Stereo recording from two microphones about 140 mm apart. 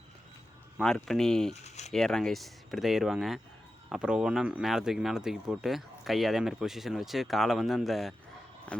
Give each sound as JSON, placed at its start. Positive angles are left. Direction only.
{"t": 0.8, "sound": "speech", "side_deg": 5}
{"t": 1.5, "sound": "a sound", "side_deg": 55}
{"t": 1.9, "sound": "speech", "side_deg": 5}